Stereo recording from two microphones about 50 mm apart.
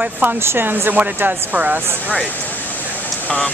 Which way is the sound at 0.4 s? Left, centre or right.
Right.